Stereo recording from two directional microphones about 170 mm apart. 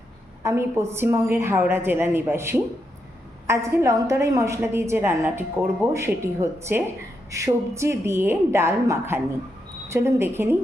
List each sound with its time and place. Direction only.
0.4 s a woman's voice: 15° right (ahead or behind)